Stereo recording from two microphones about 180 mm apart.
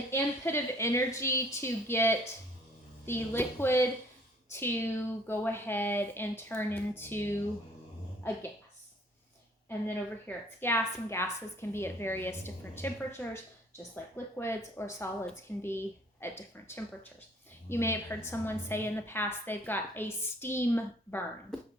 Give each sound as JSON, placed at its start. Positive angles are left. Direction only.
{"t": 0.1, "sound": "a woman's voice", "side_deg": 15}
{"t": 9.6, "sound": "a woman's voice", "side_deg": 10}